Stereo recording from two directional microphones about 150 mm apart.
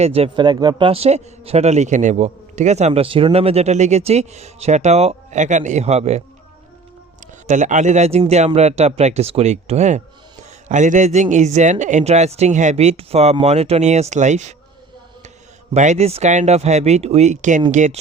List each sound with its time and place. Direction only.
0.0 s speech: 40° right (ahead or behind)
7.4 s speech: 55° right (ahead or behind)
15.7 s speech: 50° right (ahead or behind)